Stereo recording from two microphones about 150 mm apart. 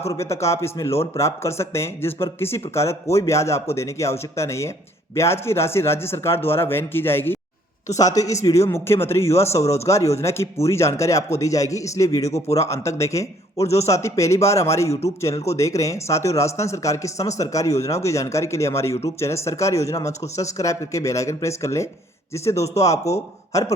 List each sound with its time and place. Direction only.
0.0 s speech: 20° left (ahead or behind)